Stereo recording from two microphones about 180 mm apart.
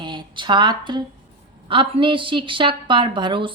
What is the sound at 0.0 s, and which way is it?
A woman's voice, 25° right (ahead or behind).